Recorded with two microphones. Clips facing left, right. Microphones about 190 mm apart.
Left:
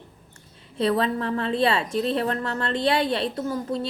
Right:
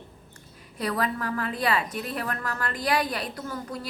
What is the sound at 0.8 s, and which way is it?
A woman's voice, 25° left (ahead or behind).